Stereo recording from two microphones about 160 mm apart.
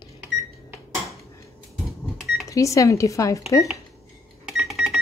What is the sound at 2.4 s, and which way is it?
Speech, 20° left (ahead or behind).